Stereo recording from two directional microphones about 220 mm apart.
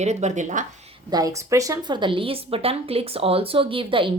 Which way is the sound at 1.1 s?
15° right (ahead or behind).